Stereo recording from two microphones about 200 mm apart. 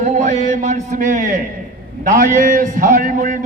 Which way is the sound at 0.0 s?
40° right (ahead or behind).